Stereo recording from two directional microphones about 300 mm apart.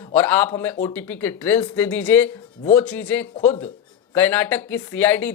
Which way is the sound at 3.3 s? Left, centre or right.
Centre.